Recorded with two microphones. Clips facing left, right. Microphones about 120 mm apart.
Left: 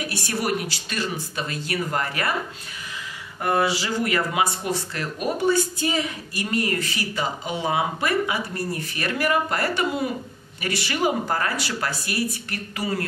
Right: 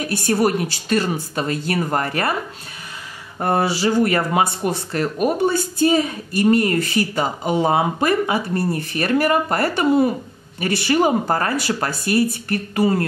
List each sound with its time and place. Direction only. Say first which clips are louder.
0.0 s speech: right 9 dB; 45° right (ahead or behind)
3.3 s speech: right 3 dB; 35° right (ahead or behind)